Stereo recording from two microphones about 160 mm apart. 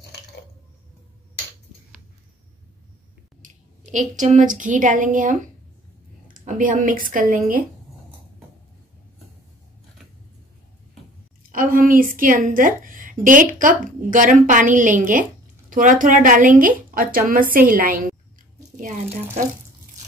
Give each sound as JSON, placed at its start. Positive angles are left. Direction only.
{"t": 3.4, "sound": "a woman's voice", "side_deg": -55}
{"t": 11.5, "sound": "a woman's voice", "side_deg": -60}